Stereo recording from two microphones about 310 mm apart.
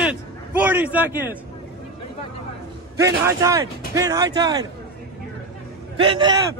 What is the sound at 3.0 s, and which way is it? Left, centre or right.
Speech, centre.